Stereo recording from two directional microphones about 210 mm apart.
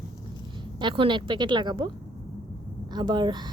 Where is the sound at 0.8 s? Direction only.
25° right (ahead or behind).